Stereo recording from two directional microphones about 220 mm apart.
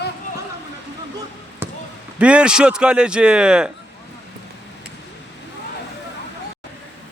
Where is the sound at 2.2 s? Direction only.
5° right (ahead or behind).